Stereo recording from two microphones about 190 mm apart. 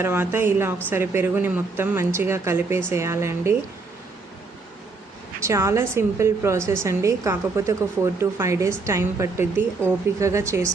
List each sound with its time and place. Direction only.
0.0 s a woman's voice: 10° right (ahead or behind)
5.4 s a woman's voice: 15° right (ahead or behind)